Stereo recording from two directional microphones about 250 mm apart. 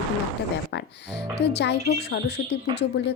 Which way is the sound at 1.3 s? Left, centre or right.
Left.